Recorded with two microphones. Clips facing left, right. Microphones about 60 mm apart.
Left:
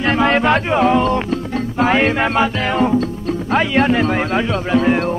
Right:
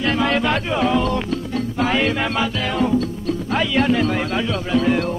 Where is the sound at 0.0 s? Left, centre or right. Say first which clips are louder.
Left 4 dB; left.